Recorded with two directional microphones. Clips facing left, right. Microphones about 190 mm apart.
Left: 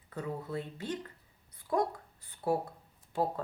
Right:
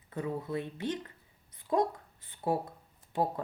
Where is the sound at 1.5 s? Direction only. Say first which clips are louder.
Right 2 dB; 20° right (ahead or behind).